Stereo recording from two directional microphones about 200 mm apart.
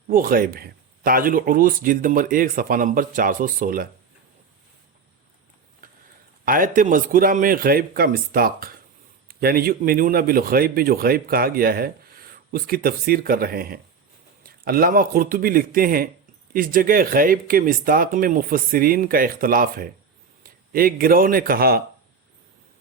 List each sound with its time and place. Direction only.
0.1 s a man's voice: 45° right (ahead or behind)
6.4 s a man's voice: 45° right (ahead or behind)